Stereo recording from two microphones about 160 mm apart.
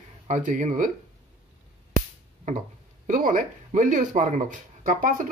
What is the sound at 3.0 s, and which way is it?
Speech, 55° right (ahead or behind).